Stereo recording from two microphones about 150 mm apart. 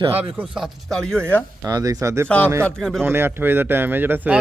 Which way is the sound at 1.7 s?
25° right (ahead or behind).